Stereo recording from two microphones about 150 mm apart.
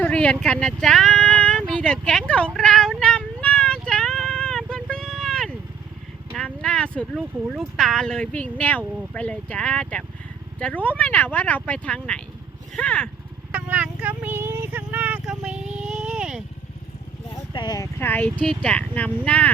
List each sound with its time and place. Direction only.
0.0 s speech: 10° left (ahead or behind)
2.6 s cat: 5° left (ahead or behind)
6.3 s a sound: 5° left (ahead or behind)
7.5 s speech: centre (ahead or behind)
13.5 s a sound: 10° right (ahead or behind)
17.3 s vehicle: 30° left (ahead or behind)
18.0 s speech: 10° left (ahead or behind)